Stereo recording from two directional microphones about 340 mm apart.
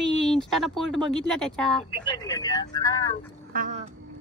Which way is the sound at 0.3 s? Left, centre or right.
Centre.